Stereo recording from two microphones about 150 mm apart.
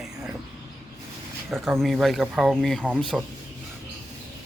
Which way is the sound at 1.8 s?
Centre (ahead or behind).